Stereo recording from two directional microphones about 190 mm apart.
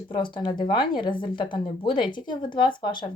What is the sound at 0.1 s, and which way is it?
Speech, 25° left (ahead or behind).